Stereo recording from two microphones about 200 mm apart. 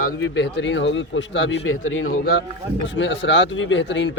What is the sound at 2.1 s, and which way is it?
Speech, 55° left (ahead or behind).